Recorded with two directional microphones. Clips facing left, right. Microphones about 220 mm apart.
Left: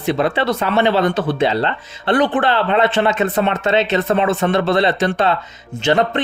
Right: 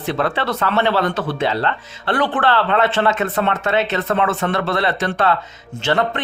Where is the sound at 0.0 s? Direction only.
15° left (ahead or behind).